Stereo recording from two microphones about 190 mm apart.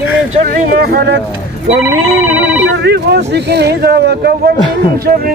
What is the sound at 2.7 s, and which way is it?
Speech, 60° right (ahead or behind).